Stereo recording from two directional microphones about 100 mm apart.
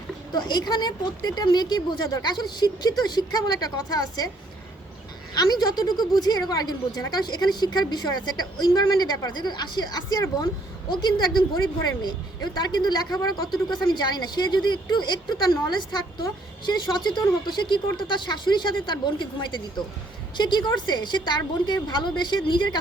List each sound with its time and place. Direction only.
0.3 s a woman's voice: 45° left (ahead or behind)
5.3 s a woman's voice: 45° left (ahead or behind)